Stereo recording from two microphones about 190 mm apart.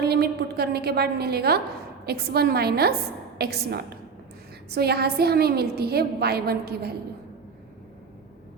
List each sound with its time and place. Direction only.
0.0 s a woman's voice: 60° right (ahead or behind)